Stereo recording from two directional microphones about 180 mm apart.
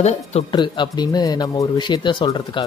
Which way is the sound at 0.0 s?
35° left (ahead or behind).